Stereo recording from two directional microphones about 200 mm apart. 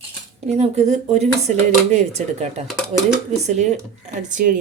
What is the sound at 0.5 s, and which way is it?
A woman's voice, 35° right (ahead or behind).